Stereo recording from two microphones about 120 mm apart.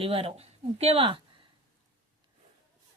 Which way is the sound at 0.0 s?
50° right (ahead or behind).